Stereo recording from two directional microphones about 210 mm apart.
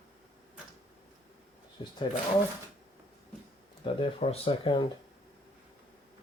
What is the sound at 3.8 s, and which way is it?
Speech, 25° left (ahead or behind).